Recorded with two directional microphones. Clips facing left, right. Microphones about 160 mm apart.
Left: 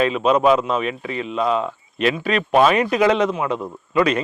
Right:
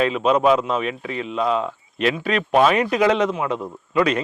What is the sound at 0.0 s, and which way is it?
Speech, 10° left (ahead or behind).